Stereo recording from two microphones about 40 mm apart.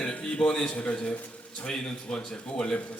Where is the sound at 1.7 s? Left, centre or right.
Centre.